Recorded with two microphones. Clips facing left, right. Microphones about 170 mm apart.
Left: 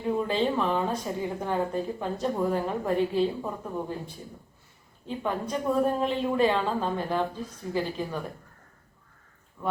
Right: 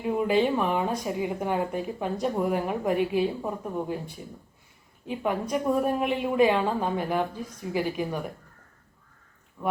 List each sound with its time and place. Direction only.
0.0 s speech: 15° right (ahead or behind)
9.6 s speech: 15° right (ahead or behind)